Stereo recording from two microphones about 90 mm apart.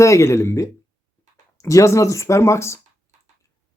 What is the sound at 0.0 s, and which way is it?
Speech, 35° left (ahead or behind).